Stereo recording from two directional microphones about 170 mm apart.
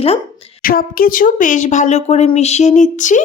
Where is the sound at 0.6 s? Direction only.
55° left (ahead or behind).